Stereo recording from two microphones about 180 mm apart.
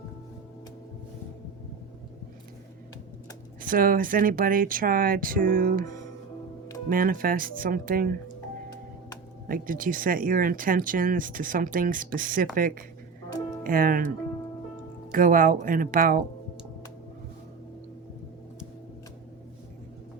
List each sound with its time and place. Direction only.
3.6 s speech: 50° right (ahead or behind)
6.9 s speech: 50° right (ahead or behind)
9.5 s speech: 50° right (ahead or behind)
15.1 s speech: 50° right (ahead or behind)